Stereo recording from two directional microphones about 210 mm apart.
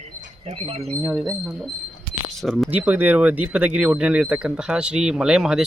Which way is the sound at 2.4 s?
Centre (ahead or behind).